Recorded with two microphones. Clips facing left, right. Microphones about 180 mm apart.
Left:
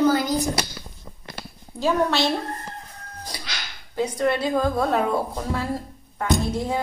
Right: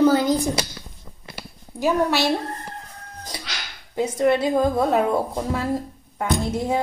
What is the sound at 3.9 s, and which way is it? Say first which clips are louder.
A woman's voice: right 3 dB; 20° right (ahead or behind).